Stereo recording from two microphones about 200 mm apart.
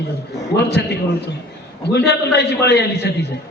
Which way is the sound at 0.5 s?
55° left (ahead or behind).